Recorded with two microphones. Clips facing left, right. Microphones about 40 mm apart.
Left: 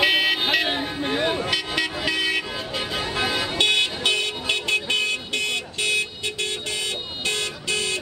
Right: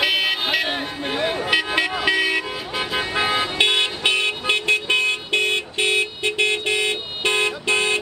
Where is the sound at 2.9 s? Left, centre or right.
Right.